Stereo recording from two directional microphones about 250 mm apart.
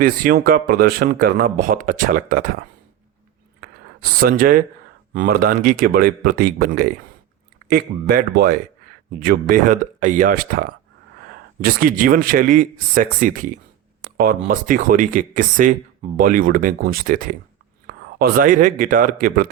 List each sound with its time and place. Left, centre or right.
0.0 s speech: right
4.0 s speech: right